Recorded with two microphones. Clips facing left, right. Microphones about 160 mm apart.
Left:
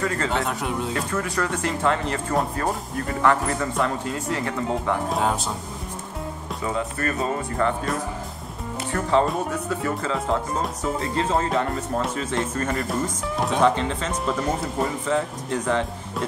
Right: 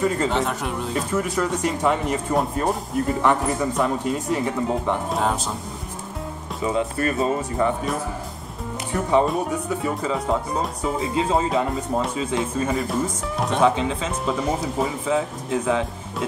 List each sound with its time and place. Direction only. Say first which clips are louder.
0.3 s speech: right 1 dB; centre (ahead or behind)
1.1 s speech: right 5 dB; 20° right (ahead or behind)
5.1 s speech: even; centre (ahead or behind)
6.6 s speech: right 4 dB; 20° right (ahead or behind)
8.9 s speech: right 1 dB; 15° right (ahead or behind)
9.3 s speech: right 2 dB; centre (ahead or behind)